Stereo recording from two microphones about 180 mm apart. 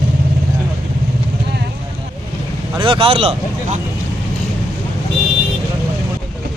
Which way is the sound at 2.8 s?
30° right (ahead or behind).